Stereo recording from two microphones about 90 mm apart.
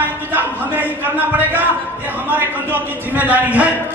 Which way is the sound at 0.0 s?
20° right (ahead or behind).